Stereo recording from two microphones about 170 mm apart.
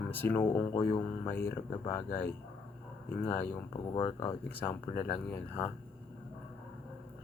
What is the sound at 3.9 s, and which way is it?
Speech, 35° left (ahead or behind).